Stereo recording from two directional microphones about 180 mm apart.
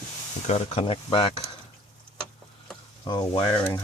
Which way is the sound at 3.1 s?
25° left (ahead or behind).